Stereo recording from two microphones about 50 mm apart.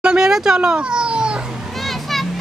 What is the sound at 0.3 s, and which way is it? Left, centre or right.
Speech, centre.